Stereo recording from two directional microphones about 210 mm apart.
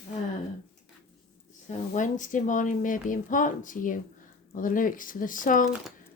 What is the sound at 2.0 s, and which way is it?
Speech, 35° left (ahead or behind).